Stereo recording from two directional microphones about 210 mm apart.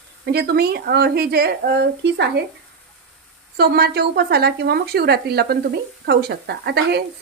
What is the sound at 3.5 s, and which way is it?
A woman's voice, 50° right (ahead or behind).